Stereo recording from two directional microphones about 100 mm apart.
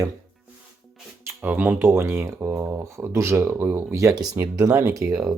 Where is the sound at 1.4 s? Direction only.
15° right (ahead or behind).